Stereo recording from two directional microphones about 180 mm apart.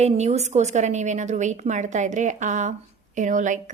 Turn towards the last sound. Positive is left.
turn(degrees=-45)  # may be behind; listen again after turning